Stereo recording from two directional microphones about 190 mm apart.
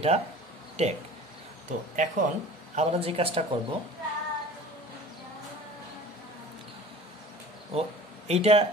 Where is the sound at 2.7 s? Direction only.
30° right (ahead or behind).